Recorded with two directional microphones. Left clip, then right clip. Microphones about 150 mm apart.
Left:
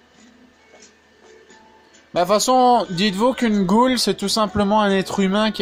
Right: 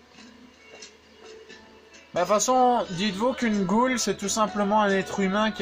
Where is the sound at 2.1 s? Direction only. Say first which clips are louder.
Left 5 dB; 40° left (ahead or behind).